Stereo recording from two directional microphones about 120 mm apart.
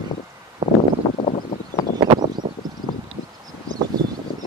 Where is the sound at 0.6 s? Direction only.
35° right (ahead or behind).